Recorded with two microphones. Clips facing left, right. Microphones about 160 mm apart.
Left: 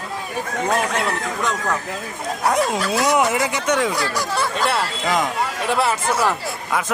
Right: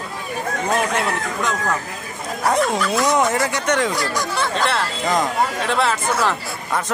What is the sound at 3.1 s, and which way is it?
Speech, 10° left (ahead or behind).